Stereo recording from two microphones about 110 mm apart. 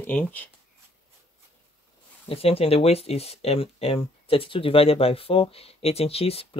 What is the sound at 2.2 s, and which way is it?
Speech, 60° left (ahead or behind).